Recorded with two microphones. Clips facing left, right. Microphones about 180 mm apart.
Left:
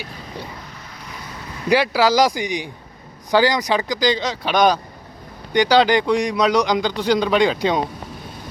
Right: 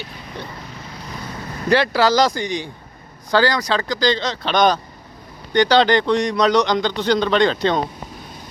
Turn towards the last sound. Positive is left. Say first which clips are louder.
# even
turn(degrees=10)  # may be behind; listen again after turning